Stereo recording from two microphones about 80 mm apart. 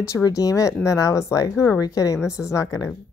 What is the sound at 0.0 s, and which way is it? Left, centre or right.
A woman's voice, left.